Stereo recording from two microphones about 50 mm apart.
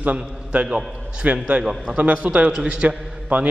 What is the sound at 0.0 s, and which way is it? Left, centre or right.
A man's voice, right.